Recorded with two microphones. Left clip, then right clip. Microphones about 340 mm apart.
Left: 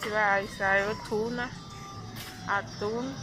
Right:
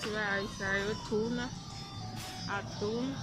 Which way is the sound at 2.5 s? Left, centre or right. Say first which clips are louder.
Left 9 dB; centre.